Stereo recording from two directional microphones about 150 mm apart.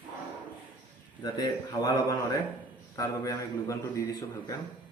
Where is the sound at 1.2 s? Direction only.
25° left (ahead or behind).